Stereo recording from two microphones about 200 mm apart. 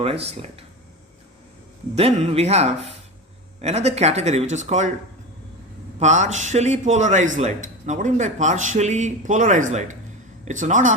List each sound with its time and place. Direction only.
0.0 s speech: 30° right (ahead or behind)
2.0 s a man's voice: 30° right (ahead or behind)
6.0 s a man's voice: 35° right (ahead or behind)